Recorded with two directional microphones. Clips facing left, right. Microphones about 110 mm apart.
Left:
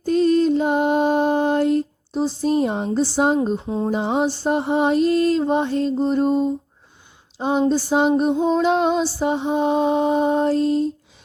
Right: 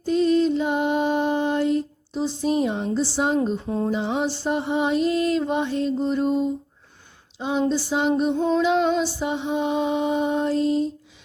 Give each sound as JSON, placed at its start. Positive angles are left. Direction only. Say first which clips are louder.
{"t": 0.0, "sound": "music", "louder": "left 2 dB", "side_deg": 45}
{"t": 7.3, "sound": "speech", "louder": "left 4 dB", "side_deg": 45}
{"t": 7.7, "sound": "a sound", "louder": "left 4 dB", "side_deg": 45}
{"t": 9.0, "sound": "music", "louder": "left 4 dB", "side_deg": 40}